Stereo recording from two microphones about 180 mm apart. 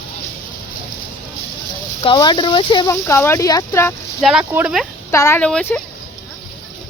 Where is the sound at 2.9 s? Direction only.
15° left (ahead or behind).